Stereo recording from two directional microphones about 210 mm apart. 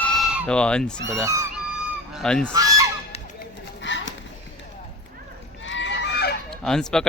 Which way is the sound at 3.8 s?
60° left (ahead or behind).